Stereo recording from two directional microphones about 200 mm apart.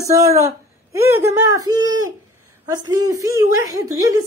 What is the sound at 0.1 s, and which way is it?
A woman's voice, 15° right (ahead or behind).